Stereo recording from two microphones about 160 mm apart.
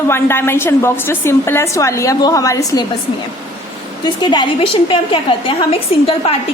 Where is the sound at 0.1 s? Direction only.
15° left (ahead or behind).